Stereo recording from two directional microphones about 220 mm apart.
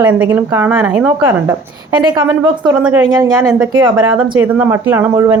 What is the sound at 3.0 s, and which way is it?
Speech, 20° right (ahead or behind).